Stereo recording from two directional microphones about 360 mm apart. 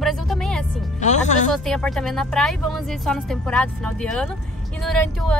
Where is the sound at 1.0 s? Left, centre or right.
Centre.